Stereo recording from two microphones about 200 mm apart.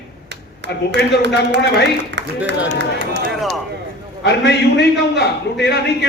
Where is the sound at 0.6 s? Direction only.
55° left (ahead or behind).